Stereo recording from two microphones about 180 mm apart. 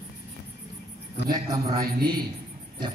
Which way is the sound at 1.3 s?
20° right (ahead or behind).